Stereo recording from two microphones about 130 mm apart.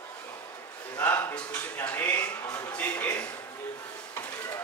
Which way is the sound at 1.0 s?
10° left (ahead or behind).